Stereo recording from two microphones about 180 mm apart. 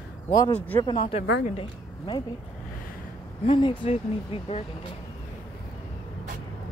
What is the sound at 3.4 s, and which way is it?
A woman's voice, 30° left (ahead or behind).